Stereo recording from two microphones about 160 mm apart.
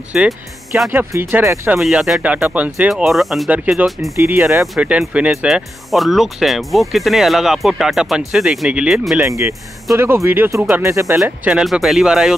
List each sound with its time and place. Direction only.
0.1 s speech: 5° right (ahead or behind)
0.8 s speech: 15° right (ahead or behind)
1.8 s speech: centre (ahead or behind)
4.2 s speech: 15° right (ahead or behind)
9.2 s speech: 15° right (ahead or behind)
11.1 s speech: 5° right (ahead or behind)